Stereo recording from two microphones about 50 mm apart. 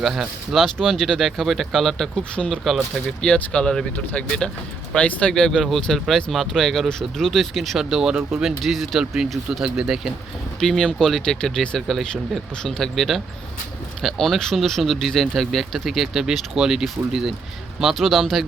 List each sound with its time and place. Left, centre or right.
0.0 s speech: centre
2.3 s speech: centre
5.3 s speech: centre
10.6 s speech: centre
12.8 s speech: centre
17.9 s speech: centre